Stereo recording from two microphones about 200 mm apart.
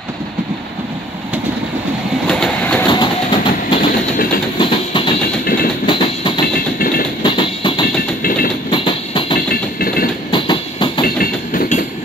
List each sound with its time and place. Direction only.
2.2 s train: 5° left (ahead or behind)
2.9 s a sound: 25° left (ahead or behind)
4.6 s train: 25° left (ahead or behind)
5.4 s train: 45° left (ahead or behind)
5.9 s train: 25° left (ahead or behind)
8.2 s train: 45° left (ahead or behind)
8.6 s train: 25° left (ahead or behind)
11.1 s train: 45° left (ahead or behind)